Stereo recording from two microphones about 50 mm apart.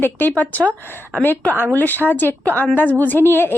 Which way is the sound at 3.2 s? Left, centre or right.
Left.